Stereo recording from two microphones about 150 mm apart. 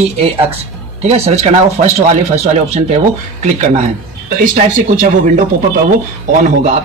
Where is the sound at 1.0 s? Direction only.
45° right (ahead or behind); by 5.4 s 60° right (ahead or behind).